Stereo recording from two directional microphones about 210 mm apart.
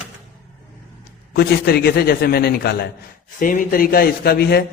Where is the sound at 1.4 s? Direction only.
50° left (ahead or behind).